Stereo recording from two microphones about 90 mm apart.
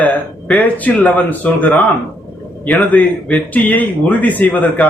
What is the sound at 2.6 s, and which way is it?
Speech, 5° left (ahead or behind).